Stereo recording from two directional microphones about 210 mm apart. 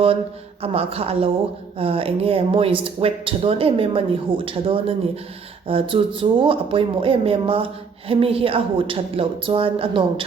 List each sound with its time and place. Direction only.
0.6 s speech: 30° right (ahead or behind)